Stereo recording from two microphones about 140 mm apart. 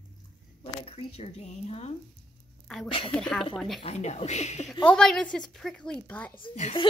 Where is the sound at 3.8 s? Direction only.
50° left (ahead or behind).